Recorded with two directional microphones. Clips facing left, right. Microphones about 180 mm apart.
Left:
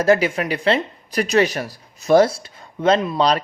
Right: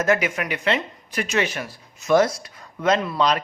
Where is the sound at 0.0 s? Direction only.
30° left (ahead or behind).